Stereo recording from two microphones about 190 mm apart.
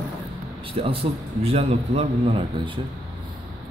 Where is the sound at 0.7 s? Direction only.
30° right (ahead or behind).